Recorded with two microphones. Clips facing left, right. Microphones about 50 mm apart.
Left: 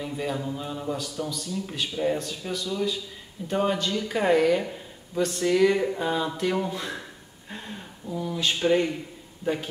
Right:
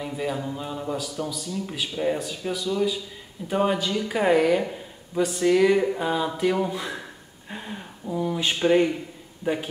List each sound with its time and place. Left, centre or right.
0.0 s speech: centre
8.1 s a sound: centre
9.4 s a man's voice: centre